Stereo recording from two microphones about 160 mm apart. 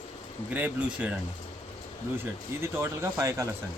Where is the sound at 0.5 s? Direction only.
10° right (ahead or behind).